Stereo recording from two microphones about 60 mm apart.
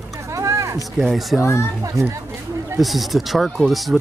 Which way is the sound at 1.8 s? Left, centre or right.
Right.